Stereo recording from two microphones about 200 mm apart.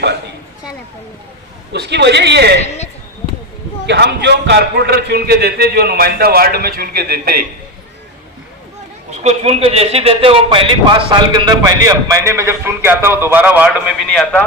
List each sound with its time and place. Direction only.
1.7 s speech: 55° right (ahead or behind)
2.6 s a man's voice: 35° left (ahead or behind)
3.8 s a man's voice: 55° right (ahead or behind)
9.2 s a man's voice: 30° right (ahead or behind); by 14.4 s centre (ahead or behind)